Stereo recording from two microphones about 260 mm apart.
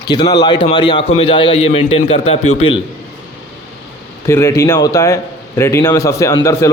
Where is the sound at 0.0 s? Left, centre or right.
Centre.